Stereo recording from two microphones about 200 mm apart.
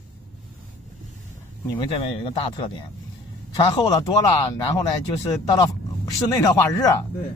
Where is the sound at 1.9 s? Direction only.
25° left (ahead or behind).